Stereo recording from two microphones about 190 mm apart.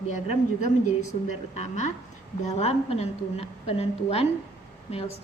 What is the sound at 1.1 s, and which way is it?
A woman's voice, 35° left (ahead or behind).